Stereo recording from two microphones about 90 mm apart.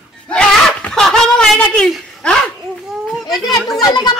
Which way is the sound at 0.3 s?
10° left (ahead or behind).